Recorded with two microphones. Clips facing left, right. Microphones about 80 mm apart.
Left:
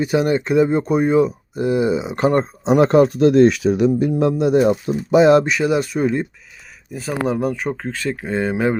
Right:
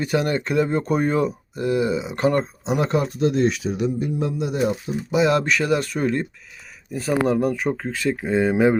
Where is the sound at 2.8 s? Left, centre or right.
Left.